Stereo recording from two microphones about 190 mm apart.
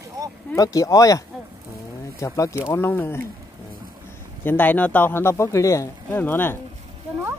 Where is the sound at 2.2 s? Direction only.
15° left (ahead or behind).